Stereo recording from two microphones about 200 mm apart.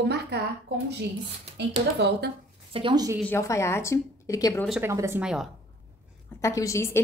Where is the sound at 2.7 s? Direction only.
25° right (ahead or behind).